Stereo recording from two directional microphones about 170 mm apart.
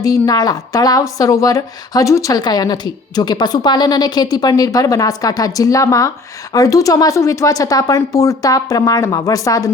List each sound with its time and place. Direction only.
0.0 s a woman's voice: 20° left (ahead or behind)